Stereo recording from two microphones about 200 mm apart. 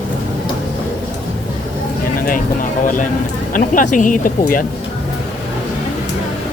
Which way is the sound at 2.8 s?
40° left (ahead or behind).